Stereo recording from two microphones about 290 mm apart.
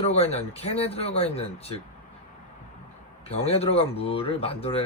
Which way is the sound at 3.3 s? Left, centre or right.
Left.